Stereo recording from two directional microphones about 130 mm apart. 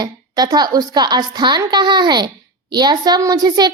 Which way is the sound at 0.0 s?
30° right (ahead or behind).